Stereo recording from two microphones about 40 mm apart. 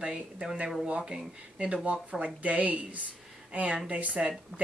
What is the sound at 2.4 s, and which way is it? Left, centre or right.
Speech, right.